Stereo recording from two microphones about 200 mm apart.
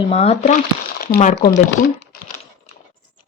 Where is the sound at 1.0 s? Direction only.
45° left (ahead or behind).